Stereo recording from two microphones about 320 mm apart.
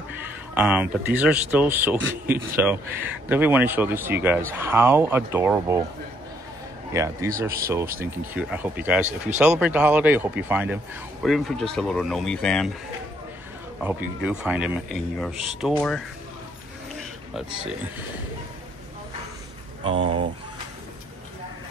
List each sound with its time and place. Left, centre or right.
0.6 s speech: centre
6.9 s speech: centre
13.7 s speech: centre
16.9 s a sound: centre
19.8 s speech: centre